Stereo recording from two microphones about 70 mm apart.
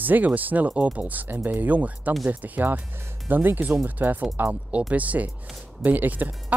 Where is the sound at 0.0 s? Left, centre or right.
Right.